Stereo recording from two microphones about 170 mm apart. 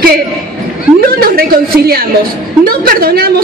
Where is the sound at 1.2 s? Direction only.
60° right (ahead or behind).